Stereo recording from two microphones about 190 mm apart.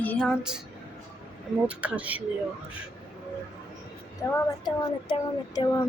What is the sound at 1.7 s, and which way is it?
Speech, 5° right (ahead or behind).